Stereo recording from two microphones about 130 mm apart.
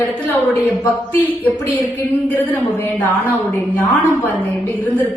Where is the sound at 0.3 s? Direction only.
15° left (ahead or behind).